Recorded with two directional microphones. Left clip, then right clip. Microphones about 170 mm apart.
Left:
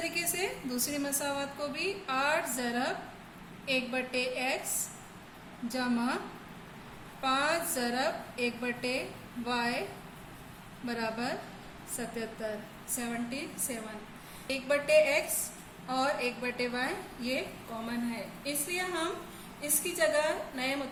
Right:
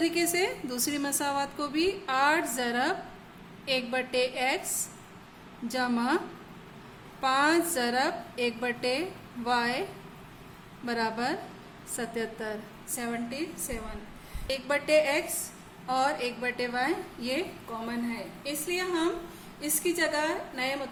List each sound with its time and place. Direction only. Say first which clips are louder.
0.0 s a woman's voice: right 6 dB; 50° right (ahead or behind)
5.6 s a woman's voice: right 4 dB; 50° right (ahead or behind)
10.8 s a woman's voice: right 5 dB; 50° right (ahead or behind)
13.0 s a woman's voice: right 3 dB; 40° right (ahead or behind)